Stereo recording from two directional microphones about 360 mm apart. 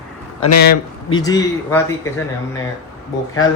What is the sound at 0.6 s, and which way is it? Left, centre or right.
Speech, left.